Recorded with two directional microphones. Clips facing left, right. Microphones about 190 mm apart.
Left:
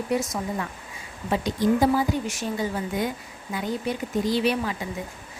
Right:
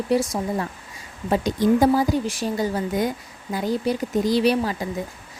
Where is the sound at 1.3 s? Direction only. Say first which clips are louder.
Right 3 dB; 45° right (ahead or behind).